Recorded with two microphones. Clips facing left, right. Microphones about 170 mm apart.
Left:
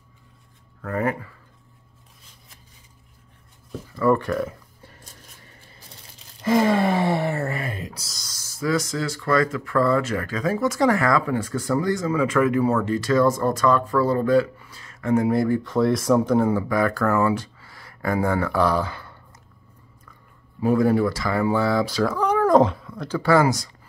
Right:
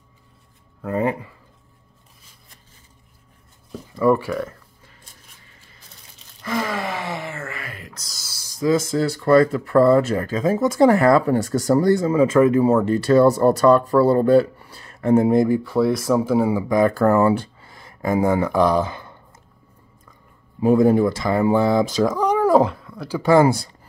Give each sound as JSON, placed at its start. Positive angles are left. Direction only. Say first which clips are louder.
{"t": 0.8, "sound": "speech", "louder": "right 3 dB", "side_deg": -20}
{"t": 3.9, "sound": "speech", "louder": "right 2 dB", "side_deg": -10}
{"t": 4.3, "sound": "speech", "louder": "left 1 dB", "side_deg": 0}
{"t": 6.4, "sound": "speech", "louder": "left 6 dB", "side_deg": 25}
{"t": 7.9, "sound": "speech", "louder": "left 2 dB", "side_deg": 5}
{"t": 8.2, "sound": "a sound", "louder": "right 5 dB", "side_deg": -10}
{"t": 8.9, "sound": "speech", "louder": "right 7 dB", "side_deg": -35}
{"t": 15.4, "sound": "speech", "louder": "right 3 dB", "side_deg": -15}
{"t": 15.7, "sound": "speech", "louder": "right 1 dB", "side_deg": 0}
{"t": 17.0, "sound": "speech", "louder": "right 5 dB", "side_deg": -35}
{"t": 20.6, "sound": "speech", "louder": "right 4 dB", "side_deg": -20}
{"t": 22.6, "sound": "cat", "louder": "even", "side_deg": 0}
{"t": 23.0, "sound": "speech", "louder": "right 3 dB", "side_deg": -15}